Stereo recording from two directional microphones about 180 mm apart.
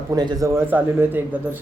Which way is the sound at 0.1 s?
20° right (ahead or behind).